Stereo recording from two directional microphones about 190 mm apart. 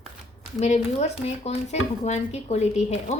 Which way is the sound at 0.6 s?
35° left (ahead or behind).